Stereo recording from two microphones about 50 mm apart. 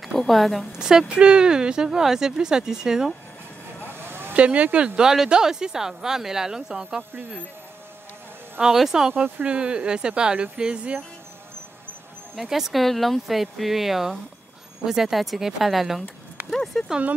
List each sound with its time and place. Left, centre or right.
0.3 s speech: centre
0.7 s speech: centre
4.0 s vehicle: right
4.3 s speech: right
8.7 s speech: centre
9.1 s speech: right
12.4 s speech: centre